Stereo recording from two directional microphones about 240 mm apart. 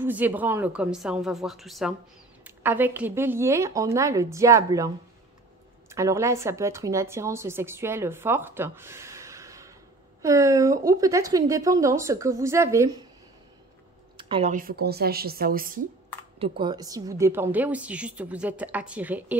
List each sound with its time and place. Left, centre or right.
0.0 s a woman's voice: centre
14.1 s a sound: right
14.5 s speech: right
16.3 s a woman's voice: right; by 19.3 s centre